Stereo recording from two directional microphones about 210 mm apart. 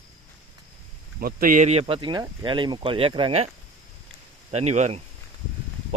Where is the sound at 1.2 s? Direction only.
45° right (ahead or behind); by 3.5 s 25° right (ahead or behind).